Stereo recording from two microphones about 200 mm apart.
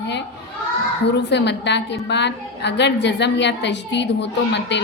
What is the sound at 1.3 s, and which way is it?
A woman's voice, 60° left (ahead or behind).